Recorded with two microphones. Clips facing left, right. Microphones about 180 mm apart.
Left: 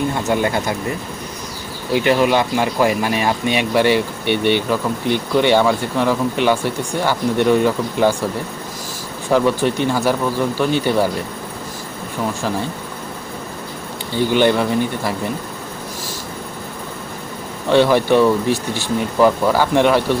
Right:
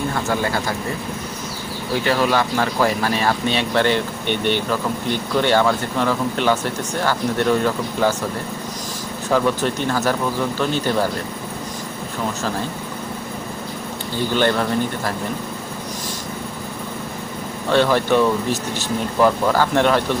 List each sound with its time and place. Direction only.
0.1 s speech: 20° left (ahead or behind)
1.9 s speech: 15° left (ahead or behind)
9.3 s speech: 15° left (ahead or behind)
14.3 s speech: 15° left (ahead or behind)
17.7 s speech: 15° left (ahead or behind)